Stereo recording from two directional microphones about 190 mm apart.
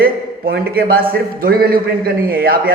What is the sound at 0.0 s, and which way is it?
A man's voice, 55° right (ahead or behind).